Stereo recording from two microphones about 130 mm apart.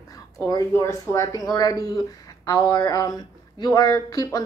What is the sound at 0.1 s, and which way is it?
Speech, 25° left (ahead or behind).